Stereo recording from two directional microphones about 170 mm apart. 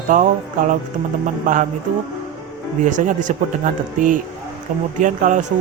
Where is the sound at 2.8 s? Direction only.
50° right (ahead or behind).